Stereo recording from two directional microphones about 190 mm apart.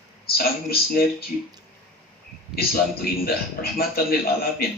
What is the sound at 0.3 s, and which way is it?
Speech, 55° left (ahead or behind).